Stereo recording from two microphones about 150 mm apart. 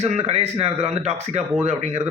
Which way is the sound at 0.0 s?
45° right (ahead or behind).